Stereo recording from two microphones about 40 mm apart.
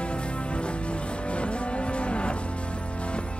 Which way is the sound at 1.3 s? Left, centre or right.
Left.